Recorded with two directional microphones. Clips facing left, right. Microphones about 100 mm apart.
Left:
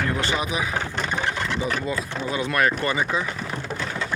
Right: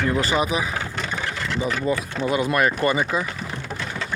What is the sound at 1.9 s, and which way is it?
Speech, 50° right (ahead or behind).